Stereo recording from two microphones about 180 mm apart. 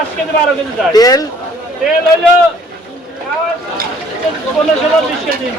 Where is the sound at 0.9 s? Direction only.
20° left (ahead or behind).